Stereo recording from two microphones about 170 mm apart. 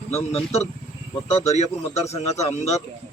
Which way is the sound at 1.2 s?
40° left (ahead or behind).